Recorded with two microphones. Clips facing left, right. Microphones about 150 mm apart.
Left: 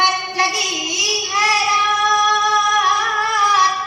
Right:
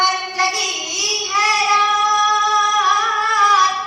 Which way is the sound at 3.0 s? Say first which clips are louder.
Right 1 dB; 25° left (ahead or behind).